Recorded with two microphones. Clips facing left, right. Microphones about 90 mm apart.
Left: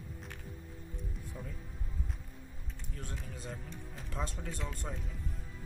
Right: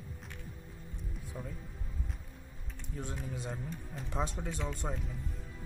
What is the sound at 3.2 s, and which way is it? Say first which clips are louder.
Speech: right 5 dB; 5° right (ahead or behind).